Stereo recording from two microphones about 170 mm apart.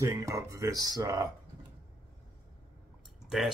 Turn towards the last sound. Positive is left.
turn(degrees=-5)  # may be behind; listen again after turning